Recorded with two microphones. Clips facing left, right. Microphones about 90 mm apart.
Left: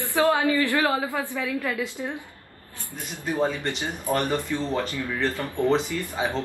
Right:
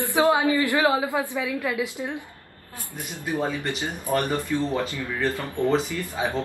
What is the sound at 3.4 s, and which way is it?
Speech, 5° right (ahead or behind).